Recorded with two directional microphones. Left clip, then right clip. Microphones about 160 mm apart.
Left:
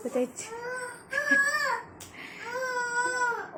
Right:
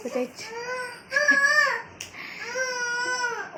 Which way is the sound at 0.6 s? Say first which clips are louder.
Right 3 dB; 20° left (ahead or behind).